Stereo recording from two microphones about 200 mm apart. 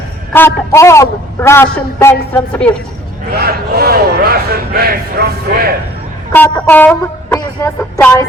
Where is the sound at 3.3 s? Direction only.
50° right (ahead or behind).